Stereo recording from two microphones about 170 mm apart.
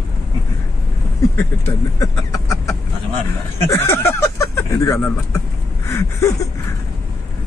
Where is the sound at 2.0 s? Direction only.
20° left (ahead or behind).